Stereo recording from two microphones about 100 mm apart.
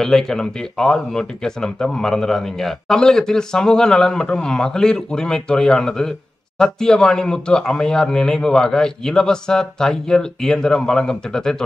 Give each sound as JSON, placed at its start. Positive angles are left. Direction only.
{"t": 0.0, "sound": "speech", "side_deg": 5}